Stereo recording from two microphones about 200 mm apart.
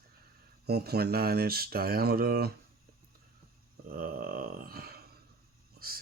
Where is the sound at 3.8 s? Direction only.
45° right (ahead or behind).